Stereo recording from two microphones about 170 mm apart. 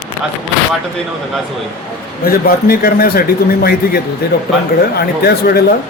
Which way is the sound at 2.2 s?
60° left (ahead or behind).